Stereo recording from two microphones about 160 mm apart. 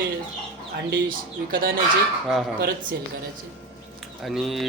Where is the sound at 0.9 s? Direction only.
65° right (ahead or behind).